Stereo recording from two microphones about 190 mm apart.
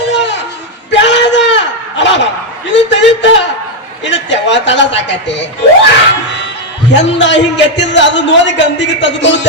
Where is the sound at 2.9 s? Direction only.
75° left (ahead or behind).